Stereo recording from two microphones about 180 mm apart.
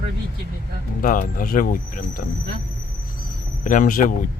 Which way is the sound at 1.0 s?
50° left (ahead or behind).